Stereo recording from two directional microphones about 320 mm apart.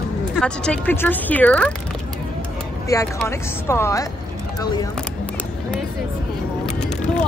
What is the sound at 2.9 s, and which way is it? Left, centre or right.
Speech, centre.